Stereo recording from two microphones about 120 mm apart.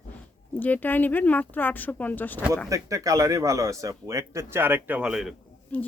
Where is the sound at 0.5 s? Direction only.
15° left (ahead or behind).